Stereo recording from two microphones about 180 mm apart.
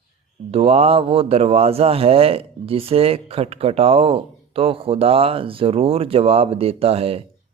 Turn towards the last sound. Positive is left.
turn(degrees=-35)  # may be behind; listen again after turning